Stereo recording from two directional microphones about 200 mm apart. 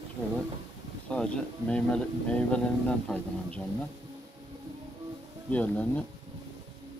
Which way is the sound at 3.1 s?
5° left (ahead or behind).